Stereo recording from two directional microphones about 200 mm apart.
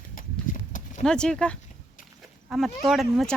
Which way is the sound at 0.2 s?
40° left (ahead or behind).